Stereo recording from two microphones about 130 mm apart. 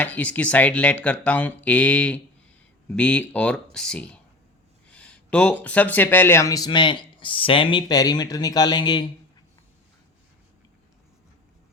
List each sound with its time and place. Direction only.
0.0 s speech: 10° left (ahead or behind)
6.7 s speech: 40° left (ahead or behind)